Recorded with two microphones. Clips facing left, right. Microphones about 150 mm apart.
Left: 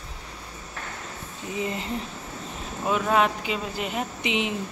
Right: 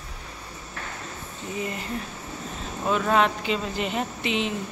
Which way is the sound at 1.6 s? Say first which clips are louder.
Left 2 dB; 25° left (ahead or behind).